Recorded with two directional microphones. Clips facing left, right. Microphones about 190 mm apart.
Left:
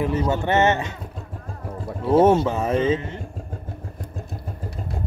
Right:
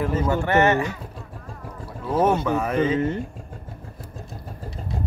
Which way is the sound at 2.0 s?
25° left (ahead or behind).